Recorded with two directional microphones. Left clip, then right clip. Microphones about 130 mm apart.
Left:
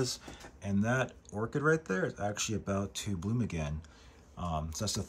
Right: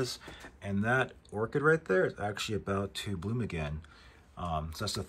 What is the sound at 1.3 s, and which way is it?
Speech, 15° left (ahead or behind).